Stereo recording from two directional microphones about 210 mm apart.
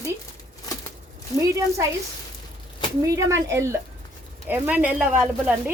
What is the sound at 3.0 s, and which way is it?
Speech, 15° right (ahead or behind).